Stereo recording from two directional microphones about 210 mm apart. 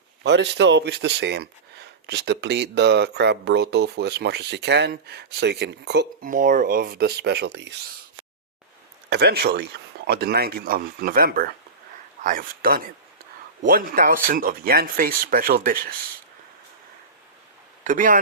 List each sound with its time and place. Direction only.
0.2 s speech: 55° right (ahead or behind)
6.2 s speech: 40° right (ahead or behind); by 7.8 s 55° right (ahead or behind)
9.0 s speech: 50° right (ahead or behind)
17.8 s speech: 40° right (ahead or behind)